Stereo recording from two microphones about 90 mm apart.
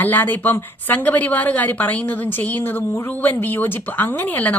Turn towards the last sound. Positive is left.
turn(degrees=20)  # may be behind; listen again after turning